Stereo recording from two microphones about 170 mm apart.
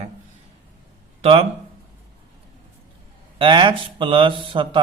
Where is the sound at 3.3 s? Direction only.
30° right (ahead or behind).